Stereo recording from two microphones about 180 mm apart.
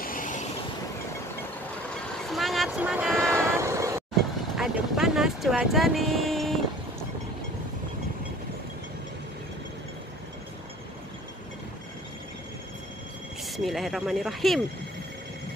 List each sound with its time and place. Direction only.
0.0 s vehicle: 50° left (ahead or behind)
2.3 s vehicle: centre (ahead or behind)
3.3 s vehicle: 15° right (ahead or behind)
4.6 s vehicle: centre (ahead or behind)
13.4 s a sound: centre (ahead or behind)